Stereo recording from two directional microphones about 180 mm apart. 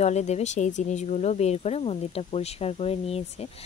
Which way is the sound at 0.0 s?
40° left (ahead or behind).